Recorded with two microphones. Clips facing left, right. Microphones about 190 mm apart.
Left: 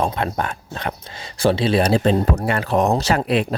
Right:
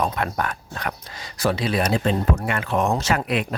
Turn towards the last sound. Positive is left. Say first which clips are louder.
# left 4 dB
turn(degrees=30)  # may be behind; listen again after turning